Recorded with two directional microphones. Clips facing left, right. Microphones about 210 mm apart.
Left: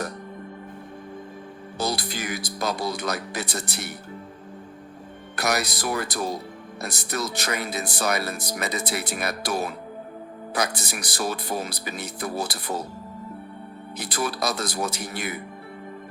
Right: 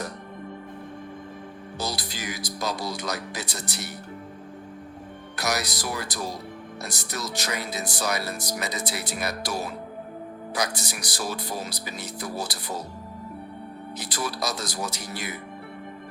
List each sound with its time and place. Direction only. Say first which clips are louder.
1.8 s speech: left 5 dB; 55° left (ahead or behind)
5.4 s speech: left 3 dB; 55° left (ahead or behind)
14.0 s speech: left 4 dB; 55° left (ahead or behind)